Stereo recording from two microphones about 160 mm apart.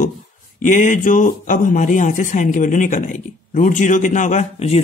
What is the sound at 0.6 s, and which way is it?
Speech, 50° left (ahead or behind).